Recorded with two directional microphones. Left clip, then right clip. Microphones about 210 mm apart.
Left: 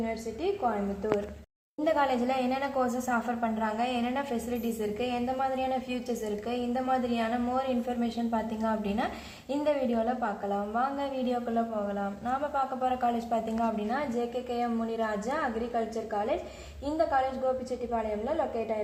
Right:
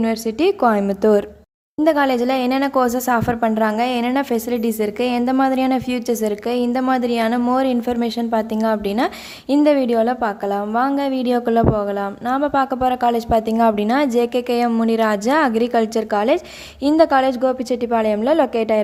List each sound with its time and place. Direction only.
0.0 s a woman's voice: 50° right (ahead or behind)
1.8 s a woman's voice: 40° right (ahead or behind)